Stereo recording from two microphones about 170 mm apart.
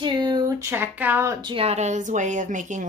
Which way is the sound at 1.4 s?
30° right (ahead or behind).